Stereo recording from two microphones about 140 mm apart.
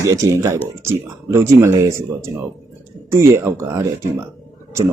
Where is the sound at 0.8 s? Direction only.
20° right (ahead or behind).